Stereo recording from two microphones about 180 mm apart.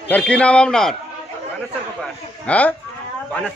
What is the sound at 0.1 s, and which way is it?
Speech, 5° left (ahead or behind).